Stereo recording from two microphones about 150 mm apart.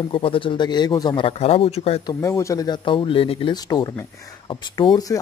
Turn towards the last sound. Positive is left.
turn(degrees=25)  # may be behind; listen again after turning